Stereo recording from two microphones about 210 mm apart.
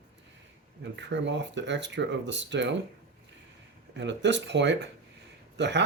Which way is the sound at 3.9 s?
55° right (ahead or behind).